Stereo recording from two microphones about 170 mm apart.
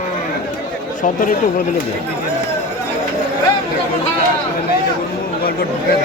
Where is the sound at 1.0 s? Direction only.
50° left (ahead or behind).